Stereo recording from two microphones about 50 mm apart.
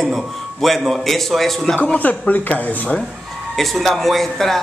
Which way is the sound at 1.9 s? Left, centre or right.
Left.